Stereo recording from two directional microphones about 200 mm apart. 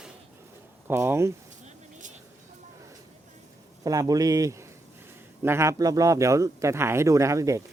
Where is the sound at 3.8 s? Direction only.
20° right (ahead or behind).